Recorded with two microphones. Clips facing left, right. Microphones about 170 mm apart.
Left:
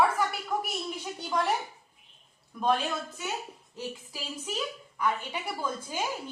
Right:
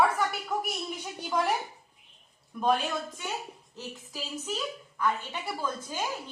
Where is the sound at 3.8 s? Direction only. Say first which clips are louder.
Left 2 dB; 10° left (ahead or behind).